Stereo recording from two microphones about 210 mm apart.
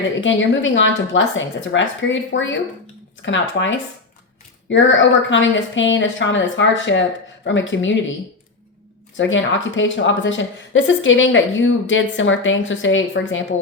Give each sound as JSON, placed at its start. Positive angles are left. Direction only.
{"t": 0.2, "sound": "a woman's voice", "side_deg": 65}
{"t": 9.1, "sound": "a woman's voice", "side_deg": 65}